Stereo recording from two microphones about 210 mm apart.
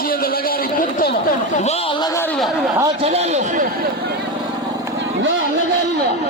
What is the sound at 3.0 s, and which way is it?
Speech, 30° right (ahead or behind).